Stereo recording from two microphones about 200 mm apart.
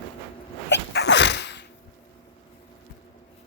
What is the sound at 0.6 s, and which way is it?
Sneeze, 60° left (ahead or behind).